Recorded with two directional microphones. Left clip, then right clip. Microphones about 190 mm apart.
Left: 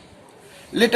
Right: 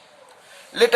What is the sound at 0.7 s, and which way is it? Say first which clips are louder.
Speech: right 1 dB; 35° right (ahead or behind).